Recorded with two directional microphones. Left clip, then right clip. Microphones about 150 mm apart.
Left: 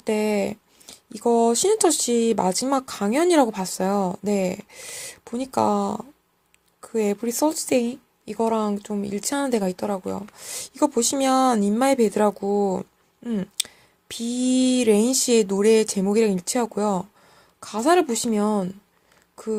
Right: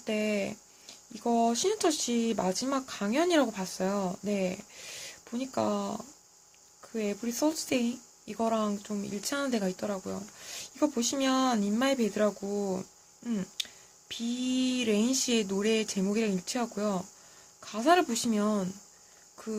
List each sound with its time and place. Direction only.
0.0 s speech: 45° left (ahead or behind)
14.1 s speech: 50° left (ahead or behind); by 18.7 s 35° left (ahead or behind)